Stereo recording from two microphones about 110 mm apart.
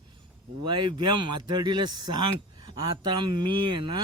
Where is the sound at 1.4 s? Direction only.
40° right (ahead or behind).